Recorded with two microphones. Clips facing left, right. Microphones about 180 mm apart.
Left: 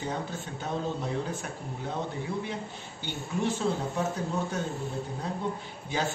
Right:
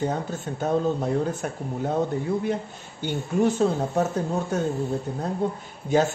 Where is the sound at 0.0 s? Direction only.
45° right (ahead or behind).